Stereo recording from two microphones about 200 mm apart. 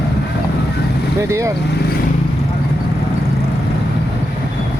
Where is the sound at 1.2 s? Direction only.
15° right (ahead or behind).